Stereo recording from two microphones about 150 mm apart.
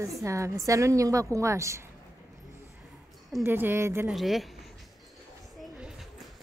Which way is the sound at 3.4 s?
15° right (ahead or behind).